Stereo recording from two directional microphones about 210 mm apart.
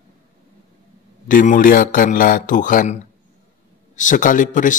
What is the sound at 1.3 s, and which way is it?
Speech, 40° left (ahead or behind).